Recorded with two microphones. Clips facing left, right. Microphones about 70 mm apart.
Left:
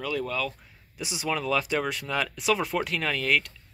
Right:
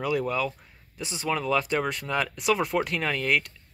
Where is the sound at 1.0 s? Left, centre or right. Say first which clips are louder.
Even; centre.